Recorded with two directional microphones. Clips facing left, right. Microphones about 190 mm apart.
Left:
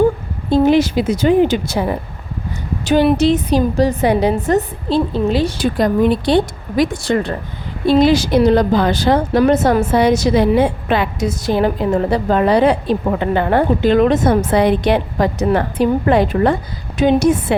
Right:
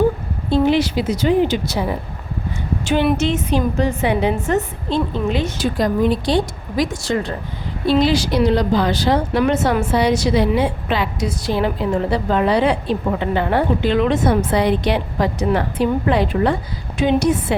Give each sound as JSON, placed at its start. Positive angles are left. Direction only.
{"t": 0.5, "sound": "a woman's voice", "side_deg": 45}
{"t": 2.8, "sound": "a woman's voice", "side_deg": 40}
{"t": 5.7, "sound": "speech", "side_deg": 60}
{"t": 7.9, "sound": "a woman's voice", "side_deg": 50}